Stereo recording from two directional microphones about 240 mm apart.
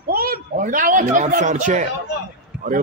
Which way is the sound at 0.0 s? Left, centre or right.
Right.